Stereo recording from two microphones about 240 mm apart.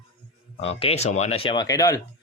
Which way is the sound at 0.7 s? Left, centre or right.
Left.